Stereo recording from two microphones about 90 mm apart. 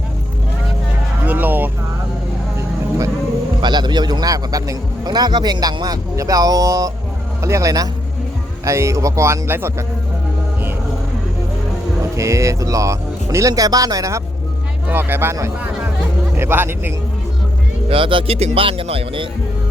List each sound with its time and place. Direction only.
1.2 s vehicle: 20° right (ahead or behind)
3.6 s a man's voice: 55° right (ahead or behind); by 9.8 s 25° right (ahead or behind)
12.1 s speech: 35° right (ahead or behind)
14.8 s speech: 25° right (ahead or behind)
16.4 s speech: 25° right (ahead or behind)
17.8 s speech: 75° right (ahead or behind)